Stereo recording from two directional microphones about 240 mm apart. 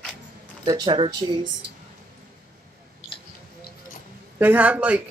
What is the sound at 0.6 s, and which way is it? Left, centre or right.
Speech, centre.